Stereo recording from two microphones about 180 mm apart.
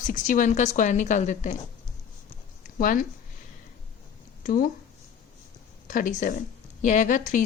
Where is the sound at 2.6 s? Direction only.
50° left (ahead or behind).